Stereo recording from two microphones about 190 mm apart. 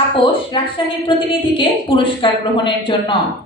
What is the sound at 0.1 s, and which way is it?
A woman's voice, 25° left (ahead or behind).